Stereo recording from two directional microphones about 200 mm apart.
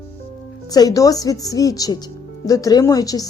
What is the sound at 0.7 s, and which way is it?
Speech, 20° left (ahead or behind).